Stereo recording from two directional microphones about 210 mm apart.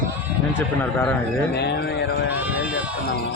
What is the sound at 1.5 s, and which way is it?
Speech, 55° left (ahead or behind).